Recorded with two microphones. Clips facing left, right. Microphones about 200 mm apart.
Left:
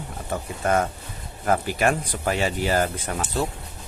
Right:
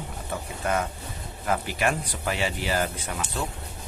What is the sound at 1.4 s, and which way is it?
Speech, 45° left (ahead or behind).